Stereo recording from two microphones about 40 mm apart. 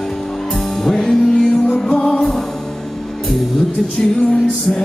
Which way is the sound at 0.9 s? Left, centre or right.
Centre.